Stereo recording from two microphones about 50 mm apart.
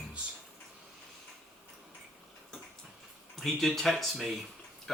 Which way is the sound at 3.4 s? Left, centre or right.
Centre.